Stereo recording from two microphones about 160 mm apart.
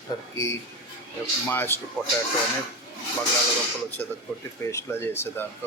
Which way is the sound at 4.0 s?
10° left (ahead or behind).